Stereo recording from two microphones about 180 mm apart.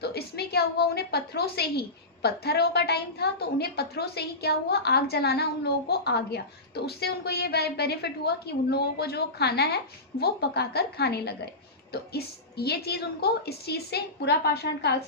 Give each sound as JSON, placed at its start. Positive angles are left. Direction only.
{"t": 0.0, "sound": "a woman's voice", "side_deg": 60}